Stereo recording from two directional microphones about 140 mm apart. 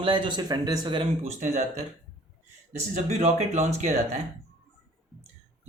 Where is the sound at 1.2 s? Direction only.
55° right (ahead or behind).